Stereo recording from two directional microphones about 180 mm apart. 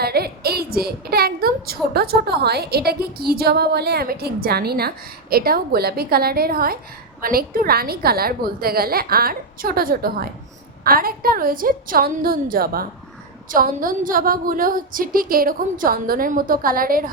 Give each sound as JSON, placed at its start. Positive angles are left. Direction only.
{"t": 0.0, "sound": "a woman's voice", "side_deg": -60}